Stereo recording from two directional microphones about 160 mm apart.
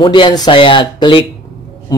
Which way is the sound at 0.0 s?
30° left (ahead or behind).